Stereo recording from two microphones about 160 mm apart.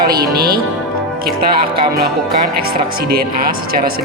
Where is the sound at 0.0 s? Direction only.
75° right (ahead or behind).